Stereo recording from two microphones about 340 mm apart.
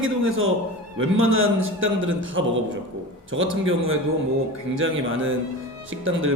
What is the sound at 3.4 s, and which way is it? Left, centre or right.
A man's voice, right.